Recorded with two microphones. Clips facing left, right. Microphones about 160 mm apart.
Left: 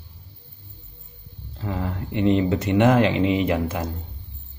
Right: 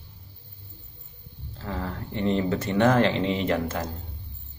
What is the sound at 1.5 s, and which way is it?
Speech, 15° left (ahead or behind).